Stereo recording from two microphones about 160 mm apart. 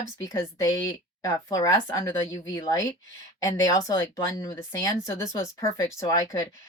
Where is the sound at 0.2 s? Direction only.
20° left (ahead or behind).